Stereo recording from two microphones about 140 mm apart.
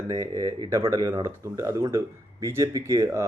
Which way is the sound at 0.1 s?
20° right (ahead or behind).